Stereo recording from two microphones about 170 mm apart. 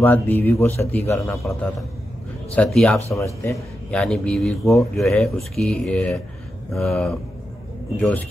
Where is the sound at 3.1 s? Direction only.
15° left (ahead or behind).